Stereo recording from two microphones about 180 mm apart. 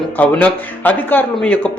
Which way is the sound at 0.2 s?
10° left (ahead or behind).